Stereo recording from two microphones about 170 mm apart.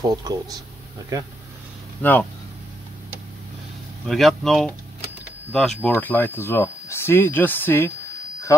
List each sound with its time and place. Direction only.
0.1 s speech: 20° right (ahead or behind)
2.0 s speech: 10° left (ahead or behind)
4.1 s speech: centre (ahead or behind)